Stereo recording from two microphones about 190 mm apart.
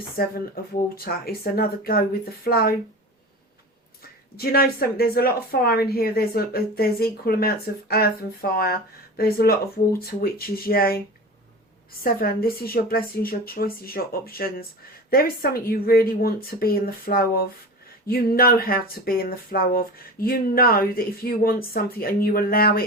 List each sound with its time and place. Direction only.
0.2 s speech: 50° left (ahead or behind)
4.4 s speech: 55° left (ahead or behind)
12.0 s speech: 50° left (ahead or behind)